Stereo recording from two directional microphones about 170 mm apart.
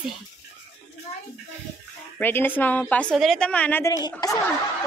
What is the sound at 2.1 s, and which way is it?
A woman's voice, 10° left (ahead or behind).